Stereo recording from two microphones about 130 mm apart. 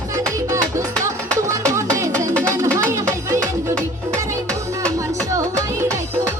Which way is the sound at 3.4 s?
10° left (ahead or behind).